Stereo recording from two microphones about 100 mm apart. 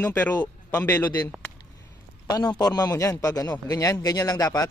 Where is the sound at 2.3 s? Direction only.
45° left (ahead or behind).